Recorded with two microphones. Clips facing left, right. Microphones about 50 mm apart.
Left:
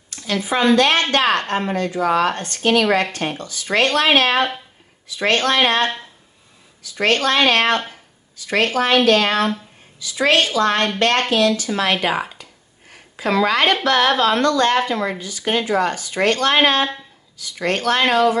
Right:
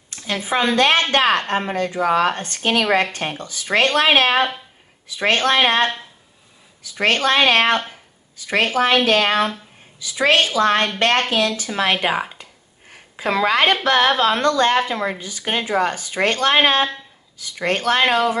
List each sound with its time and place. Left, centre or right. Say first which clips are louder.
0.1 s a woman's voice: left 1 dB; right